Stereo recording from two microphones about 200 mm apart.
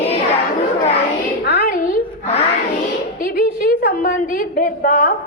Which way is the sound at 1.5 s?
50° left (ahead or behind).